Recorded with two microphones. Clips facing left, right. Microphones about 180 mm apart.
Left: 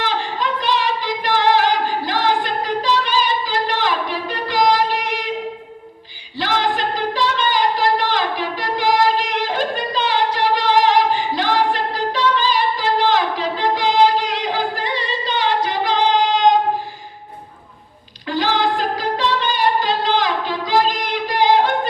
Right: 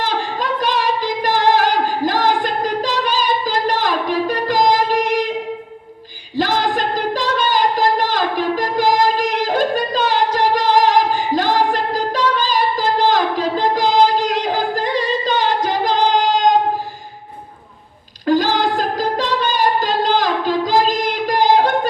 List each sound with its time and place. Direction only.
0.0 s singing: 45° right (ahead or behind)
6.3 s singing: 45° right (ahead or behind)
18.3 s singing: 45° right (ahead or behind)